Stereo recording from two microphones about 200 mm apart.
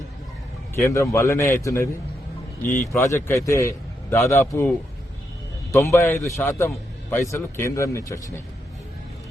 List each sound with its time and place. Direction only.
0.9 s a man's voice: 15° left (ahead or behind)
2.9 s a man's voice: 10° left (ahead or behind)
5.7 s a man's voice: 15° left (ahead or behind)